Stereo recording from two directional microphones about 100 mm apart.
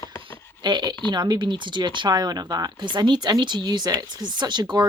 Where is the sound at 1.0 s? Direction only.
45° right (ahead or behind).